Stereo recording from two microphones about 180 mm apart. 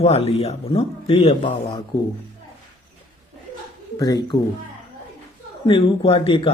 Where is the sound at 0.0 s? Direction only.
35° left (ahead or behind).